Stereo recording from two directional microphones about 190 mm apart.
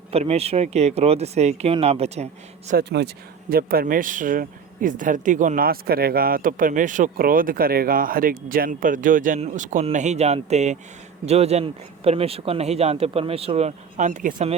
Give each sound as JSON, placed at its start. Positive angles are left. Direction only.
{"t": 0.1, "sound": "speech", "side_deg": -30}
{"t": 2.7, "sound": "speech", "side_deg": -60}
{"t": 3.5, "sound": "speech", "side_deg": -50}